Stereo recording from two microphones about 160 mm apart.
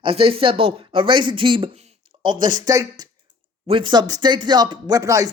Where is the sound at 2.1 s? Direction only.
30° right (ahead or behind).